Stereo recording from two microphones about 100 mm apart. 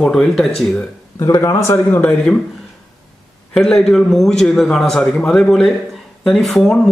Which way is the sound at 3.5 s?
5° left (ahead or behind).